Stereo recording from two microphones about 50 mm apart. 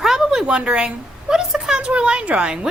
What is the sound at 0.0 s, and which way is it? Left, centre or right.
A woman's voice, centre.